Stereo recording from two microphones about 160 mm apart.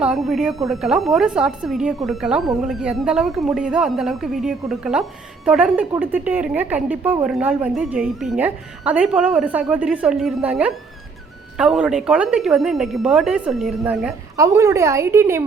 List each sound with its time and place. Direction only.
0.0 s a woman's voice: centre (ahead or behind)
14.3 s a woman's voice: 20° right (ahead or behind)